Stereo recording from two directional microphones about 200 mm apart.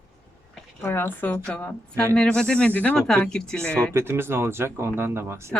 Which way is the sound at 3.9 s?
10° right (ahead or behind).